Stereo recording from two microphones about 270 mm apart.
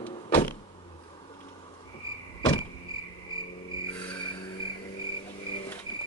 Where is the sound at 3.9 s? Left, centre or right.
Centre.